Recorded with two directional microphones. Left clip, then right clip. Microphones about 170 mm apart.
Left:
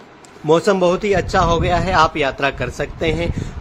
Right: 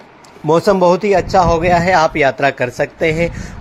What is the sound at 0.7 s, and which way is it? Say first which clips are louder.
A man's voice: right 4 dB; 10° right (ahead or behind).